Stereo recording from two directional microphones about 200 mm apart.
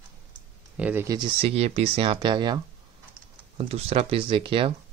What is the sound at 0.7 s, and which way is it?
Speech, 10° right (ahead or behind).